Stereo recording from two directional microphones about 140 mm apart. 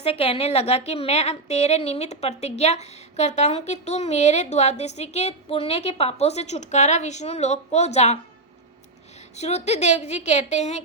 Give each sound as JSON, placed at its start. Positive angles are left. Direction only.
{"t": 0.0, "sound": "a woman's voice", "side_deg": 45}
{"t": 9.3, "sound": "a woman's voice", "side_deg": 50}